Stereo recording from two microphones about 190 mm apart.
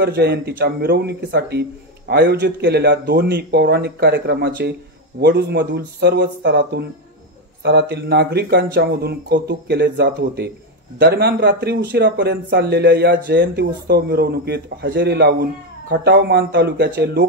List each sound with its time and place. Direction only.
0.0 s speech: 55° right (ahead or behind)